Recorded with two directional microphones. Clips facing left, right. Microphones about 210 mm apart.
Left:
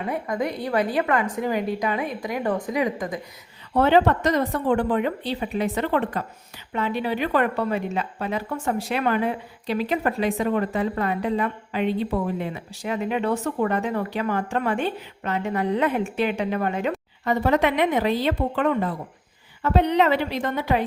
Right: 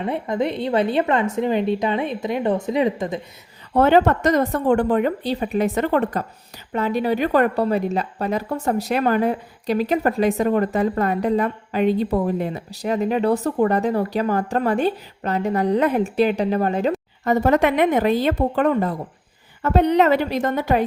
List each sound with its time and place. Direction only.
0.0 s a woman's voice: 25° right (ahead or behind)
3.8 s a woman's voice: 45° right (ahead or behind)
17.2 s speech: 45° right (ahead or behind)